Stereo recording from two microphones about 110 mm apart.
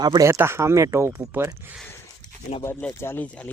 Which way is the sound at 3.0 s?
20° left (ahead or behind).